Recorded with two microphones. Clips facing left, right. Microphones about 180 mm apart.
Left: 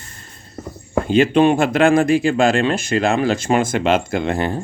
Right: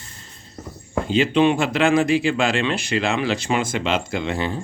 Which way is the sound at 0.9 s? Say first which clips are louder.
Left 5 dB; 50° left (ahead or behind).